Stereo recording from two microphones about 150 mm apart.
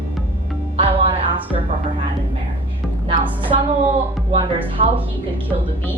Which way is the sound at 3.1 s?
35° right (ahead or behind).